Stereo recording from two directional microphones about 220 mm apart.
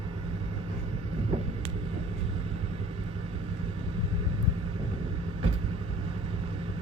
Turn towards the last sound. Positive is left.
turn(degrees=-25)  # may be behind; listen again after turning